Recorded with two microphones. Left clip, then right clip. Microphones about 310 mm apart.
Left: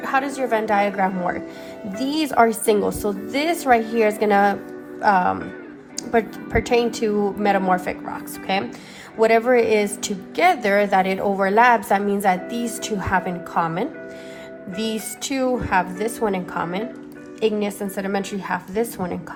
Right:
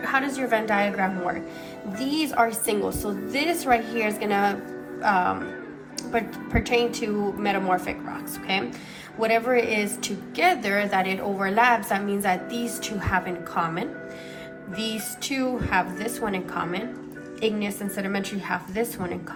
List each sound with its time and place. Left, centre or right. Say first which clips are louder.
0.0 s a woman's voice: left 3 dB; centre